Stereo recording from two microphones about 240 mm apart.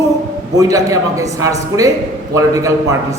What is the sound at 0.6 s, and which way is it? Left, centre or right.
A man's voice, centre.